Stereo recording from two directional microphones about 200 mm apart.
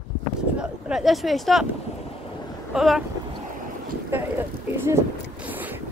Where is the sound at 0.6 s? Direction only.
5° right (ahead or behind).